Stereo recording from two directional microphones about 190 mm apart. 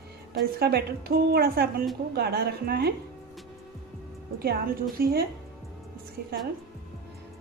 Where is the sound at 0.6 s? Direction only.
55° right (ahead or behind).